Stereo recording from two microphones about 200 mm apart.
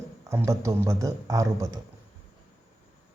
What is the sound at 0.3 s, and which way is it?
A man's voice, 15° right (ahead or behind).